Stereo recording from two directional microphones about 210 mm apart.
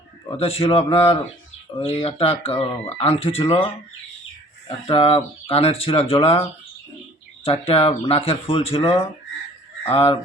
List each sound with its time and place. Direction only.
0.3 s speech: 30° left (ahead or behind)
4.9 s speech: 25° left (ahead or behind)
7.4 s speech: 25° left (ahead or behind)